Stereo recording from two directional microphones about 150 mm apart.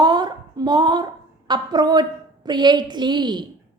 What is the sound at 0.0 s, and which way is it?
A woman's voice, 30° right (ahead or behind).